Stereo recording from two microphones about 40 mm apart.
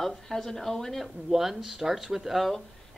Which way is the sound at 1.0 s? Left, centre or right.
Centre.